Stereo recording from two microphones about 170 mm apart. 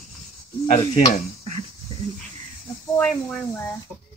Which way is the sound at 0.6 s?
40° left (ahead or behind).